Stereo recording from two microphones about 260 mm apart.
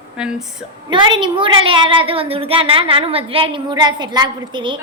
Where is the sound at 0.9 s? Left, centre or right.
Centre.